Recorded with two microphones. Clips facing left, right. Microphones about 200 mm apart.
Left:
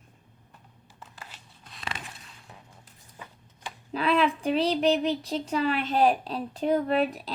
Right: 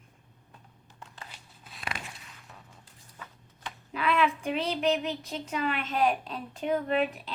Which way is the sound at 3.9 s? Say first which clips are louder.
Left 3 dB; 30° left (ahead or behind).